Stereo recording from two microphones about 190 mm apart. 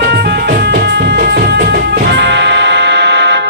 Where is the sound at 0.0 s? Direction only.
60° right (ahead or behind).